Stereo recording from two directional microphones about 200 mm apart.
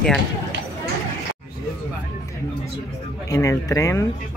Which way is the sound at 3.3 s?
15° left (ahead or behind).